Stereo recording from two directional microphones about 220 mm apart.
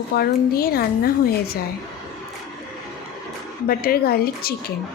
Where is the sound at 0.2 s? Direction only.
45° left (ahead or behind).